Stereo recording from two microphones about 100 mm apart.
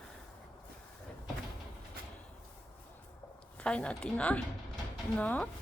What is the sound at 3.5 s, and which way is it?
A woman's voice, 10° left (ahead or behind).